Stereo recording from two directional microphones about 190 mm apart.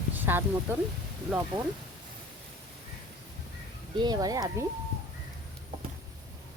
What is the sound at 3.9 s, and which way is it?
Speech, 20° right (ahead or behind).